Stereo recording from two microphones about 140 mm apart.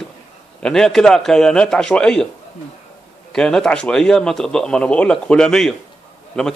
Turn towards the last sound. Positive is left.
turn(degrees=5)  # may be behind; listen again after turning